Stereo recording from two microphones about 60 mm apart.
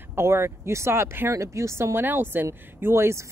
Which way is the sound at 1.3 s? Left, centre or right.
Right.